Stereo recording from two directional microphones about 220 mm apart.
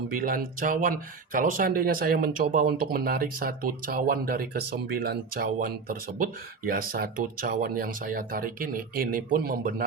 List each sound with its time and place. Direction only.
0.1 s speech: 40° right (ahead or behind)